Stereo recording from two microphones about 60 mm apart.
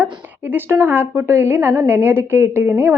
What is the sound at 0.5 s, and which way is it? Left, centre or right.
A woman's voice, right.